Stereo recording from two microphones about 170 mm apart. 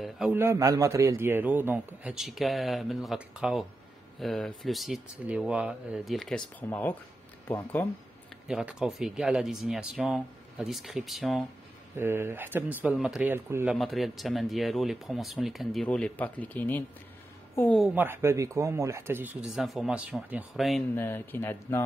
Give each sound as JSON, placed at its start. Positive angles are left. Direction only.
{"t": 0.0, "sound": "a man's voice", "side_deg": -5}
{"t": 0.4, "sound": "a man's voice", "side_deg": -20}
{"t": 8.5, "sound": "speech", "side_deg": -5}
{"t": 12.0, "sound": "a man's voice", "side_deg": -15}
{"t": 13.7, "sound": "speech", "side_deg": 0}
{"t": 17.9, "sound": "a man's voice", "side_deg": -15}
{"t": 19.5, "sound": "speech", "side_deg": 0}
{"t": 20.9, "sound": "speech", "side_deg": 15}